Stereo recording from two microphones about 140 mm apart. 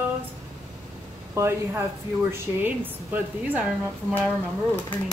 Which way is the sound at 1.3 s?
20° right (ahead or behind).